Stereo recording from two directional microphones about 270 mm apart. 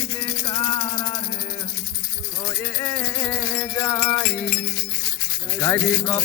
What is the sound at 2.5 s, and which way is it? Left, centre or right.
Rattle, centre.